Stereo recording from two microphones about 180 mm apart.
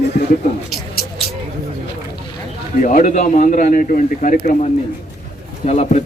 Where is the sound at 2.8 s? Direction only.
45° left (ahead or behind).